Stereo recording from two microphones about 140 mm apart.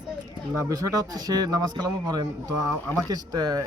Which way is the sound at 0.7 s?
25° right (ahead or behind).